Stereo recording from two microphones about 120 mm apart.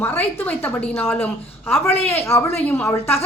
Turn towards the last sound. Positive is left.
turn(degrees=20)  # may be behind; listen again after turning